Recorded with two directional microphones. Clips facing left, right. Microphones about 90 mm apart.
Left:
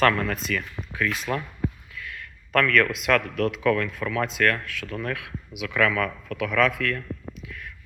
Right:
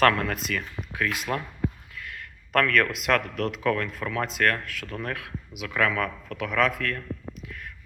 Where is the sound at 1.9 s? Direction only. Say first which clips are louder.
Left 1 dB; 45° right (ahead or behind).